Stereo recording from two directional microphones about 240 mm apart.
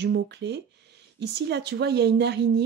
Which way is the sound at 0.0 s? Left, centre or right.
Right.